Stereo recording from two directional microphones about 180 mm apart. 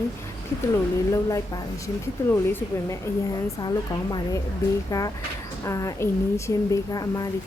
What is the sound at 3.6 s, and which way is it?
A woman's voice, 20° left (ahead or behind).